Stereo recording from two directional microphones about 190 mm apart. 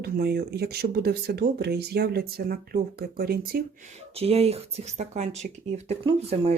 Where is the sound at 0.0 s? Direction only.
55° right (ahead or behind).